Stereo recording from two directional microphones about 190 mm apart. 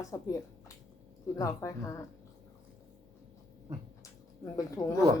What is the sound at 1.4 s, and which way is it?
Speech, 15° left (ahead or behind).